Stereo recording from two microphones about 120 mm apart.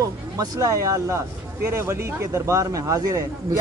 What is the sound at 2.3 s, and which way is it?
Speech, 25° right (ahead or behind).